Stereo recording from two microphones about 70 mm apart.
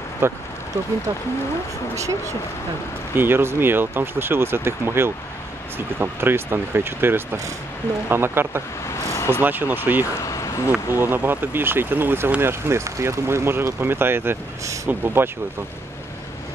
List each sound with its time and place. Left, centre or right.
0.2 s speech: right
2.0 s speech: right
3.2 s speech: right
8.8 s vehicle: left
9.4 s speech: right
10.1 s a sound: left
10.7 s speech: right